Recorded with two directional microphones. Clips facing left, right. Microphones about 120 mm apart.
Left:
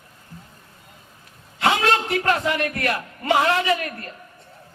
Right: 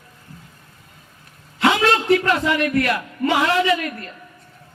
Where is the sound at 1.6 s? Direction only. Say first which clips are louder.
Right 2 dB; 40° left (ahead or behind).